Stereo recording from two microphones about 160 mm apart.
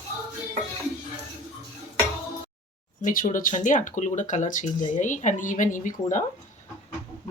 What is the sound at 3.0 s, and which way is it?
Speech, 55° left (ahead or behind).